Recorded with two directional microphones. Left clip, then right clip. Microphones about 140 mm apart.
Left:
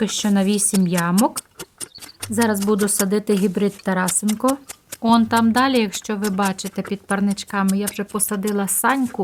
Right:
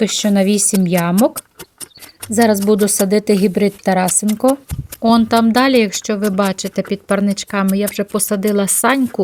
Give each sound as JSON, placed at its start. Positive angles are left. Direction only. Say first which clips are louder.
{"t": 0.0, "sound": "speech", "louder": "right 6 dB", "side_deg": -30}